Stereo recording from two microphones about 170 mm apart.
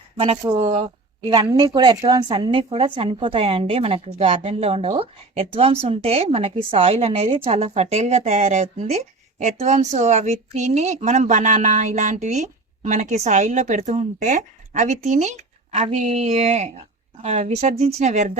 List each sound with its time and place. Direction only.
0.2 s speech: 35° right (ahead or behind)
1.5 s speech: 25° right (ahead or behind); by 18.3 s 45° right (ahead or behind)